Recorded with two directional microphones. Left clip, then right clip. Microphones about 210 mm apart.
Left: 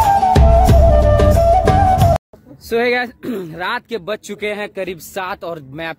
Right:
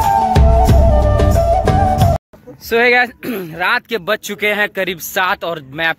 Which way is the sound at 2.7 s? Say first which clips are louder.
Right 5 dB; 10° left (ahead or behind).